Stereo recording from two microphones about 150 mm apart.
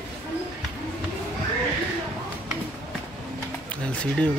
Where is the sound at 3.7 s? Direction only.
10° left (ahead or behind).